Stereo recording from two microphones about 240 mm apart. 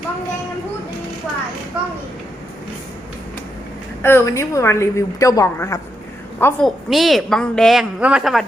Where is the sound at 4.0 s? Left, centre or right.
Centre.